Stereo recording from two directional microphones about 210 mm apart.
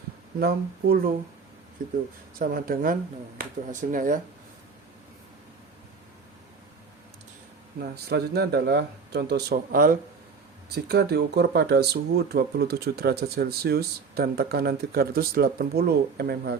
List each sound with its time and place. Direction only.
0.3 s speech: 50° right (ahead or behind)
2.4 s speech: 45° right (ahead or behind)
7.8 s speech: 50° right (ahead or behind)